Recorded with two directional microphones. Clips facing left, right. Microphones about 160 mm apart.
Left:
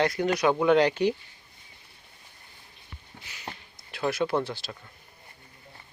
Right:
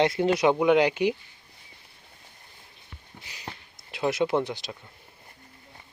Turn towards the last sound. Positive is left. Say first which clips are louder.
# right 2 dB
turn(degrees=-20)  # may be behind; listen again after turning